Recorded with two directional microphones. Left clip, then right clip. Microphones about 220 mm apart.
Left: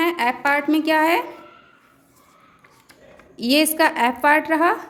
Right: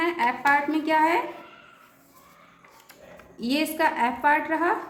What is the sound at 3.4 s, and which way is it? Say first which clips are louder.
A woman's voice: left 8 dB; 45° left (ahead or behind).